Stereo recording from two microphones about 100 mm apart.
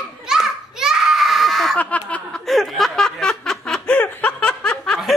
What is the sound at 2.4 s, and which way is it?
Snicker, centre (ahead or behind).